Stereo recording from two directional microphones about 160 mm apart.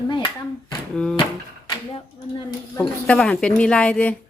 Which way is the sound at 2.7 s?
5° left (ahead or behind).